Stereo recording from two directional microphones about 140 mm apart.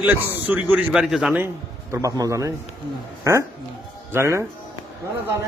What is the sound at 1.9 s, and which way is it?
A woman's voice, 25° right (ahead or behind).